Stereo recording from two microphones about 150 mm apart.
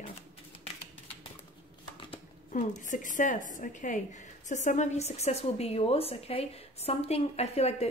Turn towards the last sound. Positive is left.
turn(degrees=45)  # may be behind; listen again after turning